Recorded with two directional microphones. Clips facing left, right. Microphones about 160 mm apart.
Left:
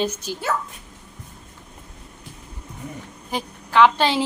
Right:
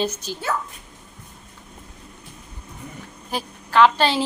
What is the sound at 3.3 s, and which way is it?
Speech, 15° left (ahead or behind).